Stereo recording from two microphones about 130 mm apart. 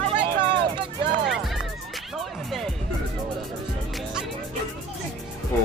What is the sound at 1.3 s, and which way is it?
Music, centre (ahead or behind).